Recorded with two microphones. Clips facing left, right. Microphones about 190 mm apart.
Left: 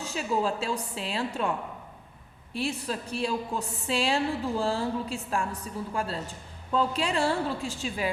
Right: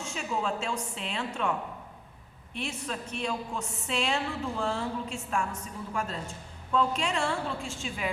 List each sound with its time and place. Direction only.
0.0 s a woman's voice: 35° left (ahead or behind)